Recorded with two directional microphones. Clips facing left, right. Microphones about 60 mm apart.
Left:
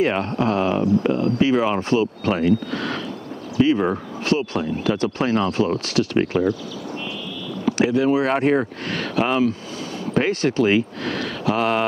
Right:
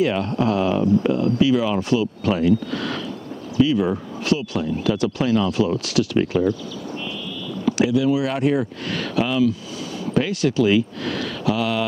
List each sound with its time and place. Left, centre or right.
0.0 s speech: left
7.6 s speech: left